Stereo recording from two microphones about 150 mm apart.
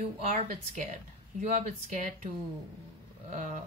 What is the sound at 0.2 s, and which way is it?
Speech, 50° right (ahead or behind).